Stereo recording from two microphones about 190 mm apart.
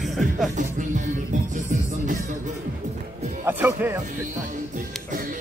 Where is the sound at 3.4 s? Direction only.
10° right (ahead or behind).